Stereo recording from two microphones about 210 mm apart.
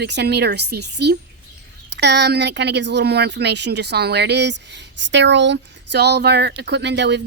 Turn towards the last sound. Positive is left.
turn(degrees=-55)  # may be behind; listen again after turning